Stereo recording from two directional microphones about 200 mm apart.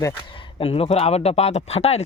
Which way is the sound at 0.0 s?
25° left (ahead or behind).